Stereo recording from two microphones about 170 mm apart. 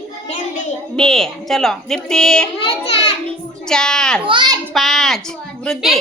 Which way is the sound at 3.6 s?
5° left (ahead or behind).